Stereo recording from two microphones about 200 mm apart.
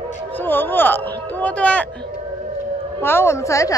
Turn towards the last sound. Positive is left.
turn(degrees=15)  # may be behind; listen again after turning